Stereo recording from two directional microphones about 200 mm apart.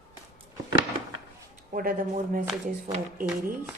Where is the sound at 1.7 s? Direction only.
45° right (ahead or behind).